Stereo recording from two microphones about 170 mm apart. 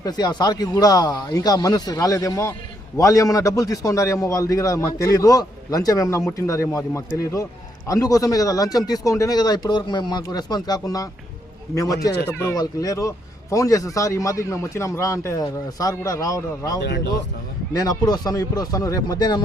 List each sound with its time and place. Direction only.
0.0 s a man's voice: 25° left (ahead or behind)